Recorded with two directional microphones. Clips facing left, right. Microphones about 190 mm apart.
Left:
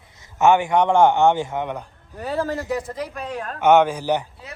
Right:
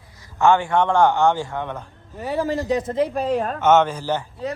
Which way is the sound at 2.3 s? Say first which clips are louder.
Right 2 dB; 20° right (ahead or behind).